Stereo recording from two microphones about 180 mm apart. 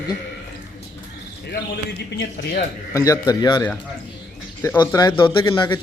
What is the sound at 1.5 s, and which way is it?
Speech, 70° left (ahead or behind).